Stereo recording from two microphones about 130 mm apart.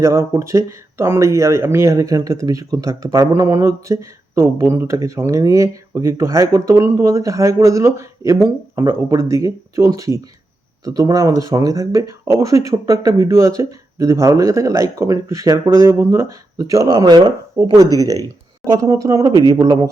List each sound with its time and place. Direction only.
0.0 s a man's voice: 20° right (ahead or behind)